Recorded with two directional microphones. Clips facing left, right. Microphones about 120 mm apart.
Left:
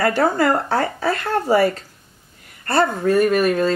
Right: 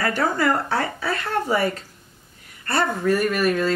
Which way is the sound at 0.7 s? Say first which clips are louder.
Left 4 dB; 45° left (ahead or behind).